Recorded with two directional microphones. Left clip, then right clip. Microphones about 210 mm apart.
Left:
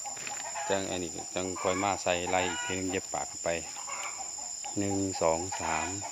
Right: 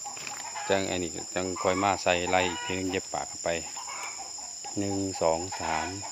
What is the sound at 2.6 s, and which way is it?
Cricket, 15° right (ahead or behind).